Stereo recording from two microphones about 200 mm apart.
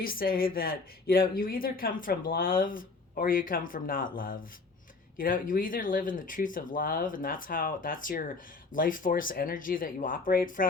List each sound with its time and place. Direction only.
0.0 s speech: 45° left (ahead or behind)